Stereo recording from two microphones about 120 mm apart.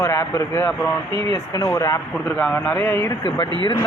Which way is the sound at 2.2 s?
10° left (ahead or behind).